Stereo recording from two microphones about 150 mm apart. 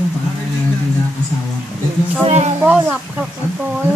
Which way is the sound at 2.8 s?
10° right (ahead or behind).